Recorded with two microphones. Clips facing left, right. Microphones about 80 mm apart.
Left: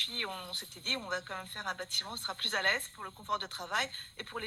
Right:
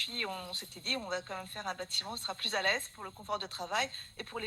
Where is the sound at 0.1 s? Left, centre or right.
Left.